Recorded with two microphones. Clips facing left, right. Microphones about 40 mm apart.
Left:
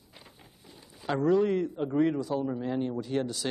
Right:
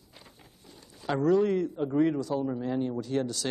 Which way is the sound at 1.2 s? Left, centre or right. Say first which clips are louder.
Right 1 dB; centre.